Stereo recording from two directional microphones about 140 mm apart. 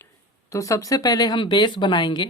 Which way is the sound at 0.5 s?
25° left (ahead or behind).